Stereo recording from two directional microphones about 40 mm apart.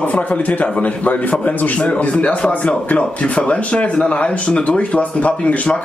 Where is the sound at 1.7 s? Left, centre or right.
Left.